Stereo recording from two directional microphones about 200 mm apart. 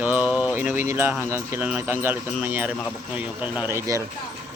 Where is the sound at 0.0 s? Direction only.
10° right (ahead or behind).